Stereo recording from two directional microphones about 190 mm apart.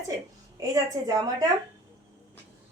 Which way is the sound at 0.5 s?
20° right (ahead or behind).